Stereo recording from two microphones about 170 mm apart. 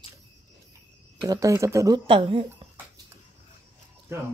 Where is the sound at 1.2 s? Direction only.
20° right (ahead or behind).